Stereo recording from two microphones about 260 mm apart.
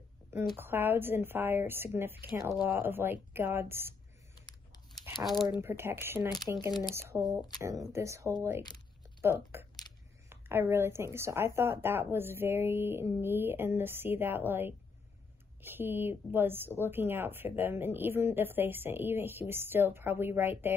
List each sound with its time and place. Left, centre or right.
0.6 s speech: centre
4.4 s a sound: centre
4.9 s speech: centre